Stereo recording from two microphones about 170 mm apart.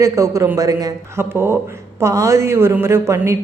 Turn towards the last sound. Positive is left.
turn(degrees=-15)  # may be behind; listen again after turning